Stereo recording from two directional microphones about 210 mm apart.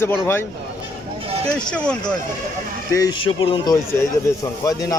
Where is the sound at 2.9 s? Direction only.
20° left (ahead or behind).